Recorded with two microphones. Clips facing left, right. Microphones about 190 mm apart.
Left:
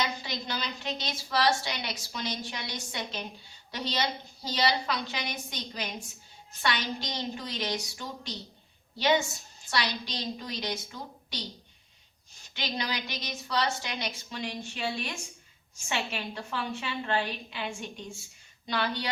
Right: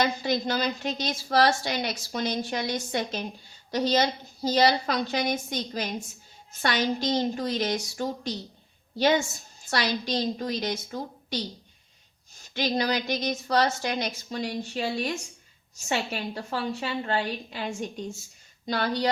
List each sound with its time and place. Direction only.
0.0 s a woman's voice: 50° right (ahead or behind)
12.5 s a woman's voice: 45° right (ahead or behind)